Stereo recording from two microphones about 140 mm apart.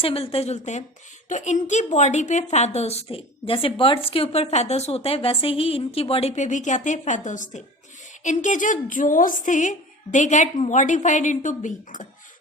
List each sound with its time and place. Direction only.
0.0 s a woman's voice: 45° left (ahead or behind); by 12.0 s 65° left (ahead or behind)